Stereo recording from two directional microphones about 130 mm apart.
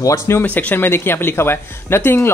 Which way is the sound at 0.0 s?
20° left (ahead or behind).